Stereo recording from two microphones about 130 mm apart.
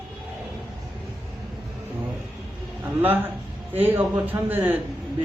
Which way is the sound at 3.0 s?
15° right (ahead or behind).